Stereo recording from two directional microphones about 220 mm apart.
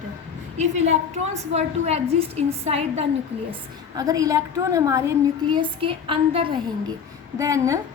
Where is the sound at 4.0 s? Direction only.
15° right (ahead or behind).